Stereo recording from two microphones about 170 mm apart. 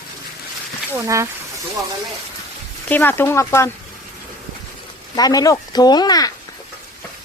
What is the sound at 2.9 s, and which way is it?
Speech, 10° left (ahead or behind).